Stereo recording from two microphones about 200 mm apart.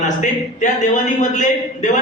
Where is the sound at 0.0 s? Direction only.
35° left (ahead or behind).